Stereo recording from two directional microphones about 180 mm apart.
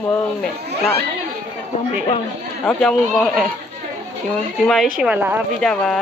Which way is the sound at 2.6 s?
5° left (ahead or behind).